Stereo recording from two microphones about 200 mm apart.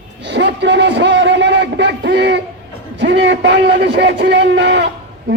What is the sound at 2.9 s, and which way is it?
A man's voice, 60° right (ahead or behind).